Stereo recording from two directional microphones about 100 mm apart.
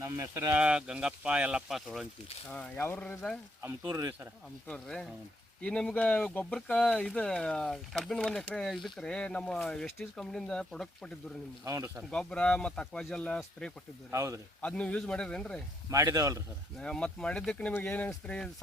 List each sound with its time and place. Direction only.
0.5 s speech: 10° right (ahead or behind)
2.5 s speech: 15° left (ahead or behind)
3.8 s speech: 30° right (ahead or behind)
4.7 s speech: 5° left (ahead or behind)
11.6 s a man's voice: 30° right (ahead or behind)
12.1 s speech: 10° left (ahead or behind)
14.1 s a man's voice: 30° right (ahead or behind)
14.6 s speech: 10° left (ahead or behind)
15.9 s a man's voice: 35° right (ahead or behind)
16.7 s speech: 10° left (ahead or behind)
18.1 s speech: 10° left (ahead or behind)